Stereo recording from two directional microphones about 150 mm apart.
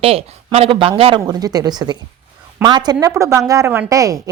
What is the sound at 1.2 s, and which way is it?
A woman's voice, 25° right (ahead or behind).